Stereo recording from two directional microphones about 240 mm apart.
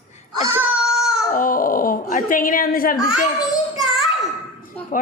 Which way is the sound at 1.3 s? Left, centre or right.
Left.